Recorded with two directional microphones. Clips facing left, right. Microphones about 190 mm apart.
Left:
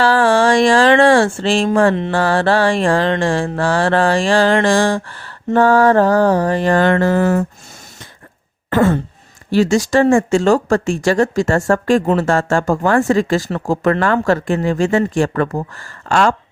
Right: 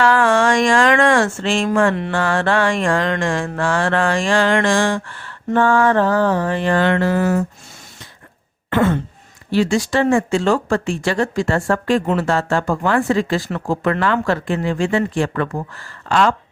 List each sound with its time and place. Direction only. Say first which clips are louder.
0.0 s a sound: left 2 dB; 30° left (ahead or behind)
2.0 s mantra: left 3 dB; 30° left (ahead or behind); by 7.4 s 50° left (ahead or behind)
8.7 s throat clearing: left 3 dB; 40° left (ahead or behind)
9.5 s speech: left 3 dB; 45° left (ahead or behind)